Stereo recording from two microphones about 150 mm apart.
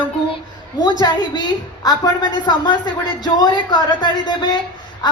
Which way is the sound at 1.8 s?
30° left (ahead or behind).